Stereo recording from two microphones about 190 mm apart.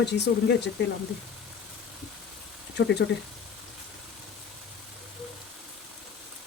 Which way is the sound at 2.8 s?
60° left (ahead or behind).